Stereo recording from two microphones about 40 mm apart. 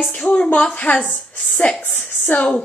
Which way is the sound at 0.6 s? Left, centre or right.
Left.